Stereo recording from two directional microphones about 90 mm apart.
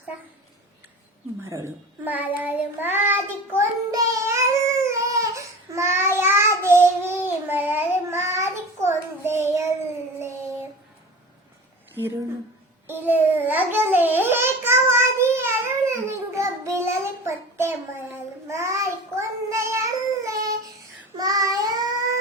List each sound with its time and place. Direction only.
1.4 s a woman's voice: 35° right (ahead or behind)
2.0 s child singing: 20° right (ahead or behind)
3.9 s baby cry: 35° right (ahead or behind)
6.7 s child singing: 25° right (ahead or behind)
11.9 s speech: 25° right (ahead or behind)
12.9 s babbling: 25° right (ahead or behind); by 20.5 s 40° right (ahead or behind)
21.2 s child singing: 45° right (ahead or behind)